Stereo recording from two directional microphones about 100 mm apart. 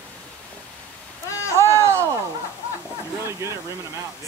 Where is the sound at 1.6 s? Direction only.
30° right (ahead or behind).